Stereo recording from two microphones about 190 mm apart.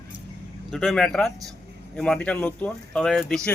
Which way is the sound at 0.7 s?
Centre (ahead or behind).